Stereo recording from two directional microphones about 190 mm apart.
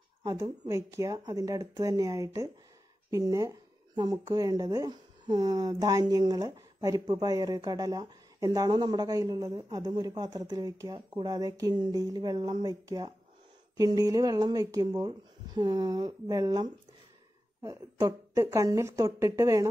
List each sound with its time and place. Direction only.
0.2 s speech: 15° right (ahead or behind)